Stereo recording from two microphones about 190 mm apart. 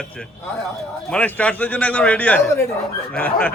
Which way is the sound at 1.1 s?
5° left (ahead or behind).